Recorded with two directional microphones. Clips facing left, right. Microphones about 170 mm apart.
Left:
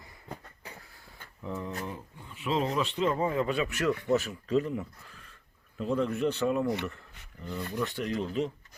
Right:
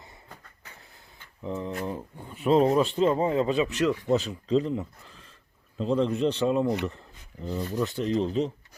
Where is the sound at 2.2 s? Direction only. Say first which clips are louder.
Right 9 dB; 50° right (ahead or behind).